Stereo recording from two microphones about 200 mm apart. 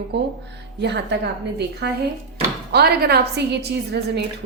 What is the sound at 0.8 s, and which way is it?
A woman's voice, 60° right (ahead or behind).